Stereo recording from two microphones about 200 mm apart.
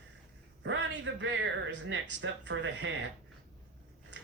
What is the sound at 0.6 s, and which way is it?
Speech, 65° right (ahead or behind).